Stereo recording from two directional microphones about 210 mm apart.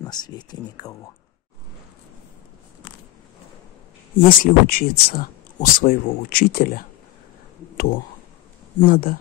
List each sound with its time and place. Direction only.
0.0 s speech: 20° left (ahead or behind)
4.4 s speech: 40° left (ahead or behind)